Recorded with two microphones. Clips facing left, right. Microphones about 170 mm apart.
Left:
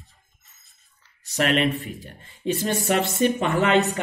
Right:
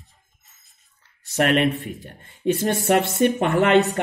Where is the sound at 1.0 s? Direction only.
55° right (ahead or behind).